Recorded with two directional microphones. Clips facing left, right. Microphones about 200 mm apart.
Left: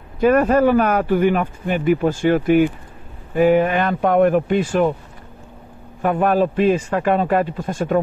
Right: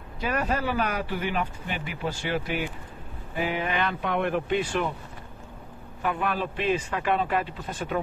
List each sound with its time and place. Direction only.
0.2 s a man's voice: 50° left (ahead or behind)
6.0 s a man's voice: 45° left (ahead or behind)